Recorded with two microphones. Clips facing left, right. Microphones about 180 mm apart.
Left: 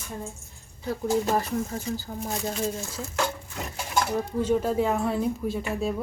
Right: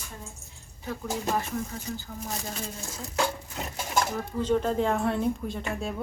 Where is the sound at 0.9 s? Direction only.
40° left (ahead or behind).